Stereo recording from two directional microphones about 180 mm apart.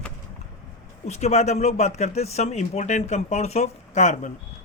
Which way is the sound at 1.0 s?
40° left (ahead or behind).